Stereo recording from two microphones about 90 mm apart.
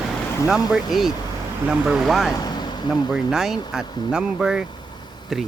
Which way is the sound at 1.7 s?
5° right (ahead or behind).